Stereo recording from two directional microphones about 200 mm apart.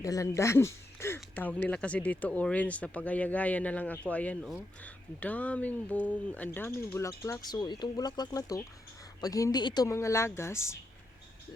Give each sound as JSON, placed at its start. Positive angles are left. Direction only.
{"t": 0.0, "sound": "speech", "side_deg": 15}